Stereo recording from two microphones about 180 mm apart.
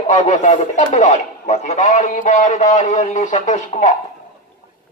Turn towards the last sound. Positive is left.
turn(degrees=40)  # may be behind; listen again after turning